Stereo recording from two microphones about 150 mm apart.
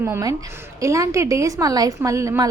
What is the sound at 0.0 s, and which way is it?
A woman's voice, 20° right (ahead or behind).